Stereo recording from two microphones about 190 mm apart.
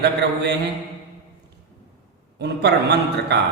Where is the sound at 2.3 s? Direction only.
60° right (ahead or behind).